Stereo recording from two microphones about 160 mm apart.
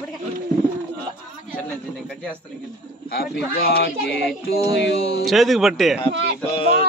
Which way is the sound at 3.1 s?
75° left (ahead or behind).